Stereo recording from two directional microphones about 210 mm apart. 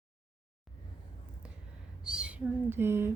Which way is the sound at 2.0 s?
5° right (ahead or behind).